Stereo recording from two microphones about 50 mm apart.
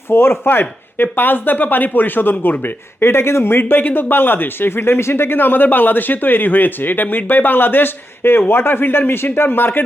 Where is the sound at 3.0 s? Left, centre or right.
Left.